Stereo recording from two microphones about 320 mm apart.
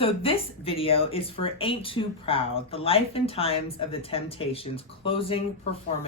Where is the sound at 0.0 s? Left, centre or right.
Centre.